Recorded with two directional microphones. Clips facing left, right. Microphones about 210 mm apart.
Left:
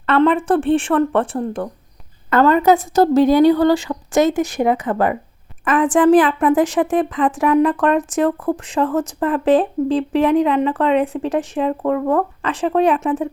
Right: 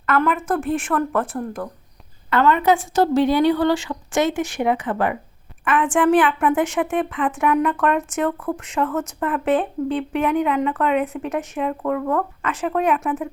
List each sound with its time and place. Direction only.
0.0 s a woman's voice: 30° left (ahead or behind)